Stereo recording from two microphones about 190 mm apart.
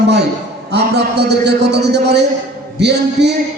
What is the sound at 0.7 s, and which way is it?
A man's voice, 60° right (ahead or behind).